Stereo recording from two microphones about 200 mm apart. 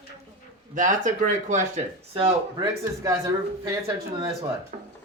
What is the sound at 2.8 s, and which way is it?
Speech, 15° right (ahead or behind).